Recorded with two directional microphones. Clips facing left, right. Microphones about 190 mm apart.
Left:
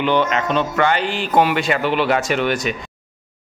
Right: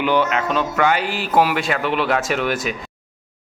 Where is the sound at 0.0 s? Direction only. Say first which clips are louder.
Left 1 dB; 10° right (ahead or behind).